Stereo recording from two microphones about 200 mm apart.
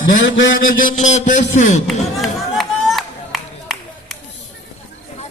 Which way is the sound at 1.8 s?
Centre (ahead or behind).